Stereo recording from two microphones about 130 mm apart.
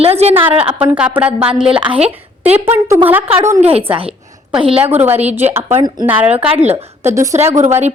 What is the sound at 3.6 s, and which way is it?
Speech, 50° right (ahead or behind).